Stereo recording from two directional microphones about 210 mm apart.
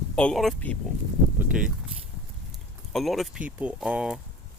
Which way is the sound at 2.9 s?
Centre (ahead or behind).